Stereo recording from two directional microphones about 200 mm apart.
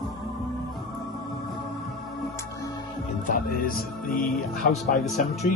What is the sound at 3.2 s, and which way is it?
Music, 45° left (ahead or behind).